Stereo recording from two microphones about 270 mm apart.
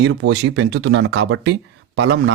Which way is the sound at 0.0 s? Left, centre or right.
Right.